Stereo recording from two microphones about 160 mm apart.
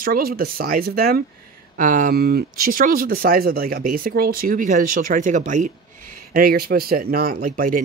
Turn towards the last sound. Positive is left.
turn(degrees=-60)  # may be behind; listen again after turning